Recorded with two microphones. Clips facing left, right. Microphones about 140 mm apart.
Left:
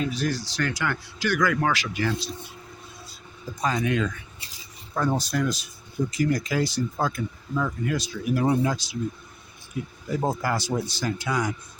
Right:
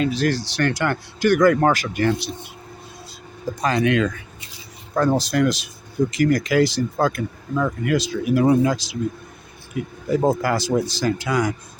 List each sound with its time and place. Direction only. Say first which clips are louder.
0.0 s speech: right 6 dB; 90° right; by 2.5 s 70° right (ahead or behind)
3.6 s speech: right 5 dB; 80° right